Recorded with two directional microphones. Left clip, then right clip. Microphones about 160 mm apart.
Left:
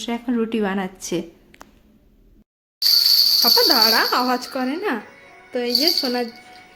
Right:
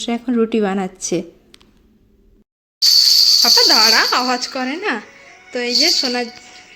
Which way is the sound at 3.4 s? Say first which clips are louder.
Right 4 dB; centre (ahead or behind).